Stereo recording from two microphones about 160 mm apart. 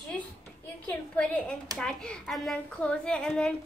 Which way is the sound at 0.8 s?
10° left (ahead or behind).